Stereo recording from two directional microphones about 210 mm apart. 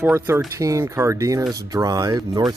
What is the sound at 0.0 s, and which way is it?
Music, 10° right (ahead or behind).